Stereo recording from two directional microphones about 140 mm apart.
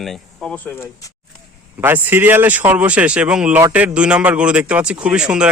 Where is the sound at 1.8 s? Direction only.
15° right (ahead or behind).